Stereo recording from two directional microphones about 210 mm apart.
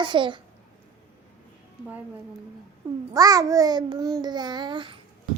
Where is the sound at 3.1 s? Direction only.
15° right (ahead or behind).